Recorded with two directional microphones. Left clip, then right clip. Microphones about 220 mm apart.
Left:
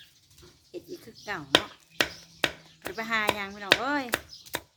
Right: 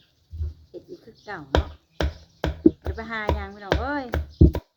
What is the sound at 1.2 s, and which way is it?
Chopping, 15° left (ahead or behind).